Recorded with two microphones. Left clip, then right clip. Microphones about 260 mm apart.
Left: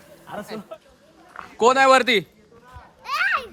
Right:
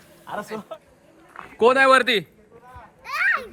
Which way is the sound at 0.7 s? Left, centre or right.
Right.